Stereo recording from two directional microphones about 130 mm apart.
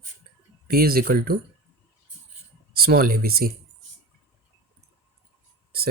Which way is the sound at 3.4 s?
90° right.